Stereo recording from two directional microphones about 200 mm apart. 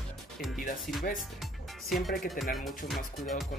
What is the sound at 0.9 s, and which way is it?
Speech, centre (ahead or behind).